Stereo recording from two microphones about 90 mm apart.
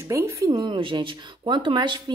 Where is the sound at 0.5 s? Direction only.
65° right (ahead or behind).